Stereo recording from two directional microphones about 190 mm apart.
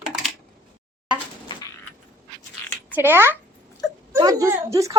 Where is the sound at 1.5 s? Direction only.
25° left (ahead or behind).